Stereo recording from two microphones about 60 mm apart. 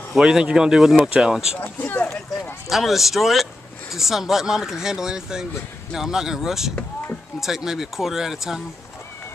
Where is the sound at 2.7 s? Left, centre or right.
Centre.